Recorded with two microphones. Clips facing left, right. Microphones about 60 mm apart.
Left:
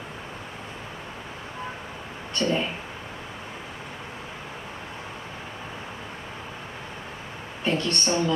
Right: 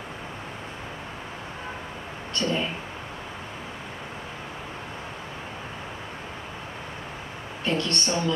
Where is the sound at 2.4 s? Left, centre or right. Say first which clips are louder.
Left 2 dB; centre.